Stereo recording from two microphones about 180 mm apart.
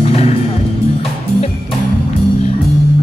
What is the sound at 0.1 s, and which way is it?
Music, 35° left (ahead or behind).